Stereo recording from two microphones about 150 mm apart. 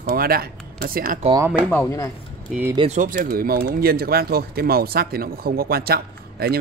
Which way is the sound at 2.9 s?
60° right (ahead or behind).